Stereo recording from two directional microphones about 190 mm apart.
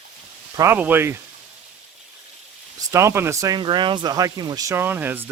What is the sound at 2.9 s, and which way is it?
Speech, 15° right (ahead or behind).